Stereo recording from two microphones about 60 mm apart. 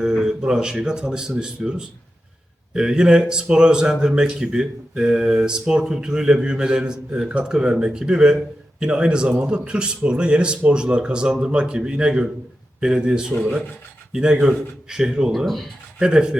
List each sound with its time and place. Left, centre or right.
0.0 s speech: centre
2.7 s speech: centre
16.0 s speech: centre